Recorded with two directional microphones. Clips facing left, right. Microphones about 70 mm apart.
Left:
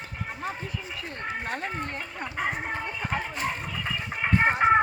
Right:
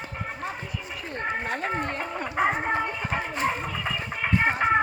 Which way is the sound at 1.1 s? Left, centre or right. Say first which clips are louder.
Right 4 dB; right.